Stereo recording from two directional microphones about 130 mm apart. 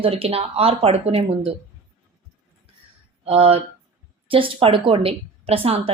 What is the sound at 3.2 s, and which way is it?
Speech, 50° right (ahead or behind).